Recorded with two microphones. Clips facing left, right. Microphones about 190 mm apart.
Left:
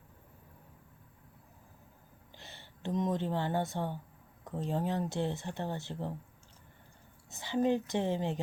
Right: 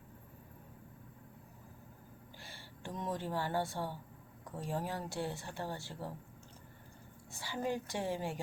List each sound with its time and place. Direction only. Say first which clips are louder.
2.4 s speech: left 7 dB; 20° left (ahead or behind)
7.3 s speech: left 8 dB; 20° left (ahead or behind)